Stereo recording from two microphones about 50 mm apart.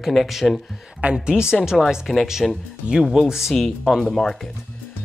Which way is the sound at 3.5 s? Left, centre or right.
Centre.